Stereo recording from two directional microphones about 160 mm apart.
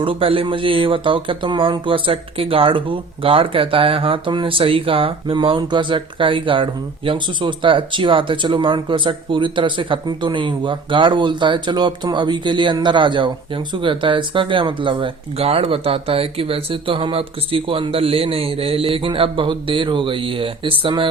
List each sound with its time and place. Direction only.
0.0 s speech: 35° right (ahead or behind)